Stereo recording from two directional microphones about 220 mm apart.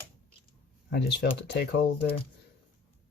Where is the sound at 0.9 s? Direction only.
50° left (ahead or behind).